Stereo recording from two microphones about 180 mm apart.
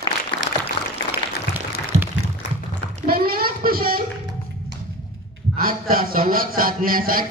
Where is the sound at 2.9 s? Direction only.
55° right (ahead or behind).